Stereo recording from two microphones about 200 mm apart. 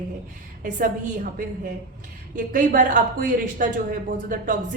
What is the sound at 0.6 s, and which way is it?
Speech, 40° right (ahead or behind).